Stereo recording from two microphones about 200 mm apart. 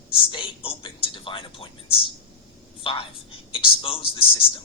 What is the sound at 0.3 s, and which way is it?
Speech, 25° left (ahead or behind).